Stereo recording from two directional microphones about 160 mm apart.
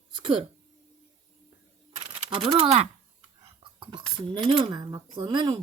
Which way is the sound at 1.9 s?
40° right (ahead or behind).